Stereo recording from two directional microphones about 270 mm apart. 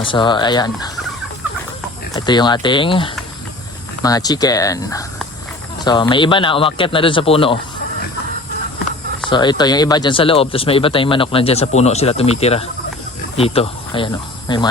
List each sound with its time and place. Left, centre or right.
0.0 s speech: centre
2.1 s speech: centre
9.3 s speech: centre